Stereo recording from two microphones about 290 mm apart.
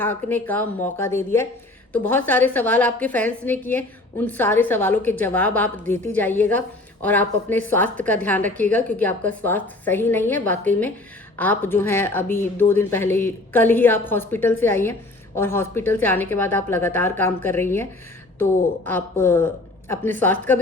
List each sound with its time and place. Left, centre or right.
0.0 s a woman's voice: centre
18.9 s speech: centre